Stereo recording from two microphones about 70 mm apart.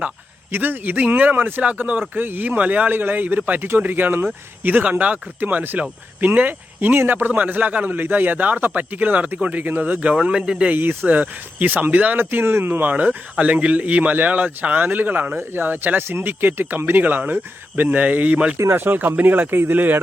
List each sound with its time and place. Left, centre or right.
0.5 s a man's voice: right; by 10.7 s centre
10.7 s a man's voice: right
18.5 s speech: right
18.8 s a man's voice: right